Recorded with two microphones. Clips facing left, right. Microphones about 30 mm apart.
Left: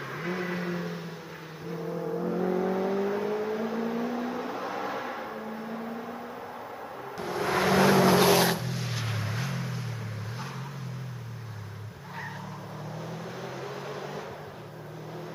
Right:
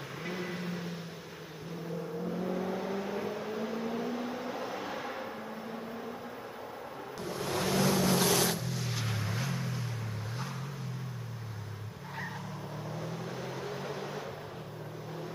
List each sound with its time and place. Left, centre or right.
0.2 s vehicle: left
2.0 s vehicle: left
2.5 s vehicle: left
7.2 s vehicle: left
7.4 s vehicle: left
8.6 s music: centre
12.9 s vehicle: centre